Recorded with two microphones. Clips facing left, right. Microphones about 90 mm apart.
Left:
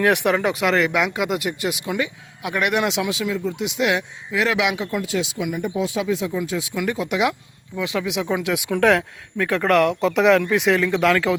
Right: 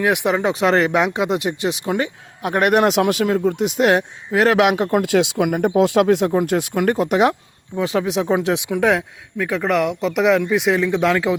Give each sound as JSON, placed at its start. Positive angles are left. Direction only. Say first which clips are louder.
{"t": 0.0, "sound": "speech", "louder": "right 1 dB", "side_deg": -15}
{"t": 0.6, "sound": "speech", "louder": "right 6 dB", "side_deg": -35}
{"t": 8.7, "sound": "speech", "louder": "left 3 dB", "side_deg": -15}